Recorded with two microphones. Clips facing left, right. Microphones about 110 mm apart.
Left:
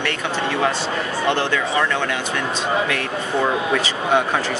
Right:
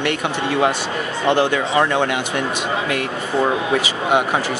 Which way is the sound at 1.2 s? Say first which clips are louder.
Right 5 dB; 15° right (ahead or behind).